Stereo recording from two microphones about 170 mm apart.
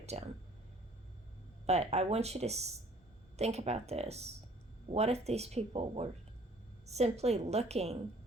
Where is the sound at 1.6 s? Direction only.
40° right (ahead or behind).